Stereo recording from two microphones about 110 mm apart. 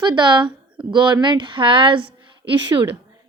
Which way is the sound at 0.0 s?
45° right (ahead or behind).